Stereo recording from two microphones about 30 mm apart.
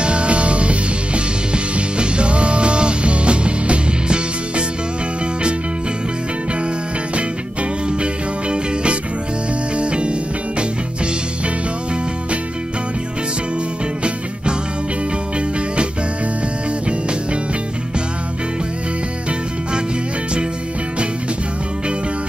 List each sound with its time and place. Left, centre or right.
0.0 s music: right
8.0 s music: right